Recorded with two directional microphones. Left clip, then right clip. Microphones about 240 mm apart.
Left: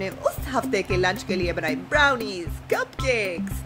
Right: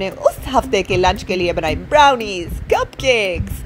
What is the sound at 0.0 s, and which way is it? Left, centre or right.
A woman's voice, centre.